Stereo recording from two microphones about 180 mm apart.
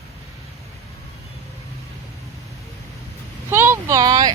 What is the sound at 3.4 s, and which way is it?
Vehicle, 15° right (ahead or behind).